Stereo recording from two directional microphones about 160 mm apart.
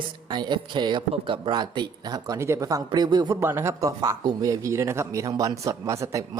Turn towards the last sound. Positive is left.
turn(degrees=-20)  # may be behind; listen again after turning